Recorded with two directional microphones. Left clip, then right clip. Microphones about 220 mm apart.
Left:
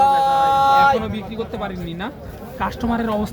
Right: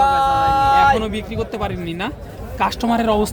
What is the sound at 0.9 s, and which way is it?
A man's voice, 40° right (ahead or behind).